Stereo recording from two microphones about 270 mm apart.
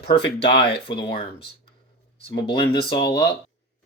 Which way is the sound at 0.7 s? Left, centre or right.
Centre.